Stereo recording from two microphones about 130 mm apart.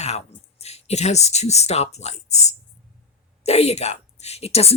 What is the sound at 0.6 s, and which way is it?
A woman's voice, 55° left (ahead or behind).